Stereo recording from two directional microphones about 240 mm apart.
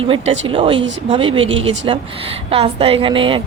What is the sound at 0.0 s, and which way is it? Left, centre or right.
Speech, right.